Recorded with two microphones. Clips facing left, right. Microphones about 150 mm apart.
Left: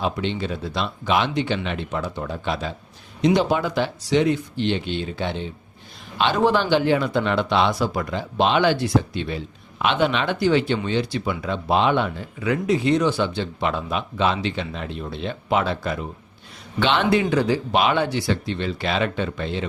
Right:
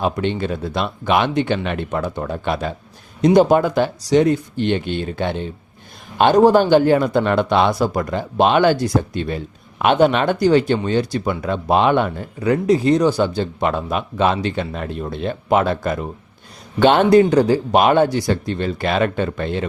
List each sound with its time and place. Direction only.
0.0 s speech: 50° right (ahead or behind)